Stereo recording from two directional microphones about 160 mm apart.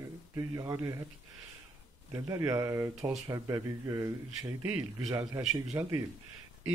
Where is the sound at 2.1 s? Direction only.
20° right (ahead or behind).